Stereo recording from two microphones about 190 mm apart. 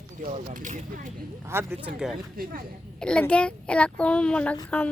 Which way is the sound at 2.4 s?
50° right (ahead or behind).